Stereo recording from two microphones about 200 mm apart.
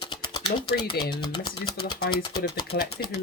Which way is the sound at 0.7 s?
20° left (ahead or behind).